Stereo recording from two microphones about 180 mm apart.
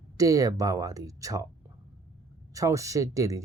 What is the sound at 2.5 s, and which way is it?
Speech, 20° right (ahead or behind).